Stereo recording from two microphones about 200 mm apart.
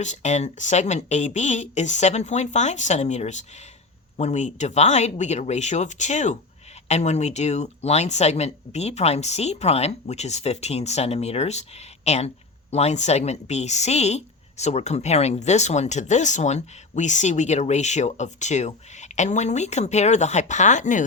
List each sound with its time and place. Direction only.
0.0 s speech: 35° left (ahead or behind)